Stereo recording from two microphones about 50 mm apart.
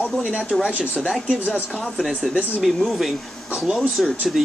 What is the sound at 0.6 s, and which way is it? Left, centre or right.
Speech, right.